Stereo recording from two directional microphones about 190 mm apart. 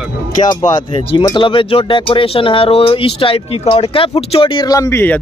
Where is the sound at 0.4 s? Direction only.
25° left (ahead or behind).